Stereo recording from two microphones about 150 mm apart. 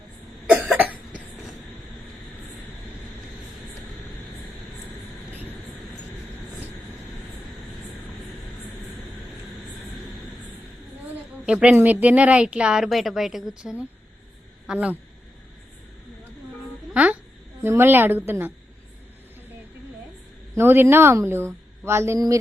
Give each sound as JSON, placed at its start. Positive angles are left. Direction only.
{"t": 0.5, "sound": "cough", "side_deg": -10}
{"t": 11.4, "sound": "speech", "side_deg": -5}
{"t": 16.9, "sound": "a sound", "side_deg": -10}
{"t": 17.6, "sound": "speech", "side_deg": -15}
{"t": 20.6, "sound": "speech", "side_deg": -15}